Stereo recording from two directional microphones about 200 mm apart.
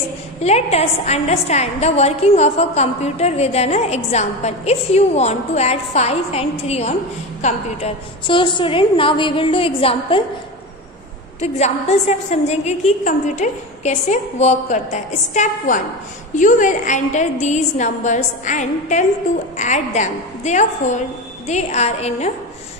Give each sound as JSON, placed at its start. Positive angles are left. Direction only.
{"t": 0.4, "sound": "a woman's voice", "side_deg": 30}
{"t": 11.4, "sound": "a woman's voice", "side_deg": 30}